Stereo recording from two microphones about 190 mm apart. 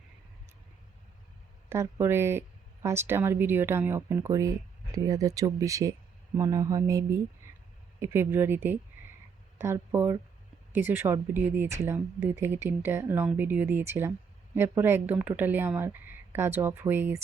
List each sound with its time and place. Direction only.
1.7 s speech: 15° right (ahead or behind)